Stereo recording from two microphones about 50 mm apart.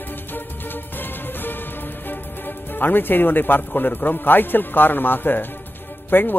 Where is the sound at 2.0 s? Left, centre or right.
Left.